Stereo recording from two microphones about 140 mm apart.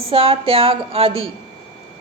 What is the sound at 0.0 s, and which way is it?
A woman's voice, 45° right (ahead or behind).